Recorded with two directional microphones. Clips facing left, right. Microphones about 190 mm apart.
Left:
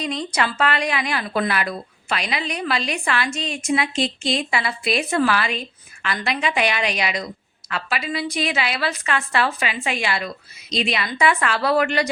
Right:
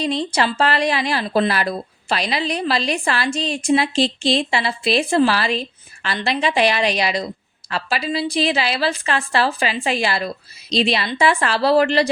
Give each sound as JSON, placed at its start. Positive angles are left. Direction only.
{"t": 0.0, "sound": "speech", "side_deg": -30}